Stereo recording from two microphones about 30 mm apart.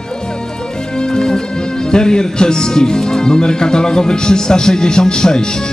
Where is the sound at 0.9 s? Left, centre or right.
Left.